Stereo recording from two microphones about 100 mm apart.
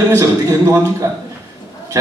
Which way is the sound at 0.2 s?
30° right (ahead or behind).